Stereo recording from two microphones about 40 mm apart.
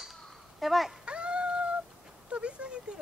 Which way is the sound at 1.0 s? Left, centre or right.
Right.